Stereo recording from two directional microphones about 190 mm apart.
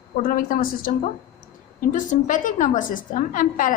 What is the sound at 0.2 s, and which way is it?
A woman's voice, 45° left (ahead or behind).